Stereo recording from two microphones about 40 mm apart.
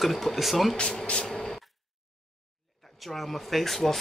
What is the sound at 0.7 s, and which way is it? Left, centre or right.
Speech, left.